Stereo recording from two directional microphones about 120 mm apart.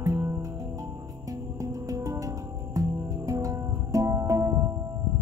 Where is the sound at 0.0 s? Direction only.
25° right (ahead or behind).